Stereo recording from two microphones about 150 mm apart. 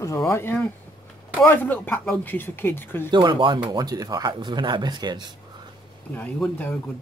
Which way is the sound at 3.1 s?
30° right (ahead or behind).